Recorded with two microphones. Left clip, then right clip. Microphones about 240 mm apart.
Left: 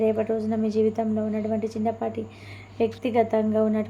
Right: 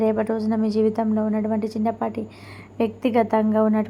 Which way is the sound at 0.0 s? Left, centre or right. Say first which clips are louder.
Right 2 dB; centre.